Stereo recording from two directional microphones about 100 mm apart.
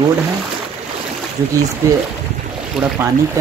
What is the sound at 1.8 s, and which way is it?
Speech, 30° right (ahead or behind).